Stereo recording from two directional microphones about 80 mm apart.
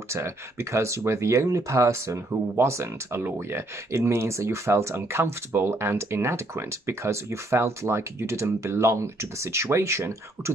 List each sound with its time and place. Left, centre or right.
0.1 s speech: right